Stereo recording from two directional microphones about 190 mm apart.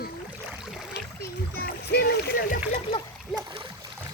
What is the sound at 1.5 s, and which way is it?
Rowboat, 55° left (ahead or behind).